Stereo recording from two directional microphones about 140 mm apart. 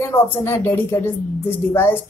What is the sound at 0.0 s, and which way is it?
Speech, 20° left (ahead or behind).